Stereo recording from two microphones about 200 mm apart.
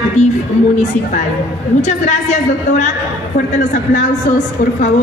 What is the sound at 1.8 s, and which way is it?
Speech, 35° left (ahead or behind).